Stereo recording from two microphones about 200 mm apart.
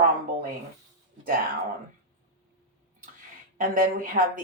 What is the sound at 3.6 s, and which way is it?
Speech, 40° right (ahead or behind).